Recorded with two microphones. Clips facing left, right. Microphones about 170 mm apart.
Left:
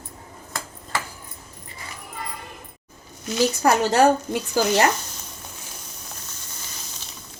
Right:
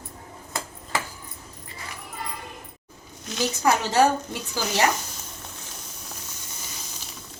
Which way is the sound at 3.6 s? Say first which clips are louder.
Left 2 dB; 55° left (ahead or behind).